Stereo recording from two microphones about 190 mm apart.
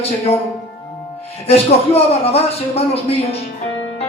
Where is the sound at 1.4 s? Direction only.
30° left (ahead or behind).